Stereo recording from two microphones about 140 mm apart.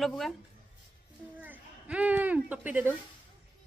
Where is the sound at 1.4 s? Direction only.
10° right (ahead or behind).